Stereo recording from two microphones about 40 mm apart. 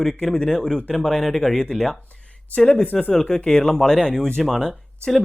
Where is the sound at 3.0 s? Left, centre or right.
Centre.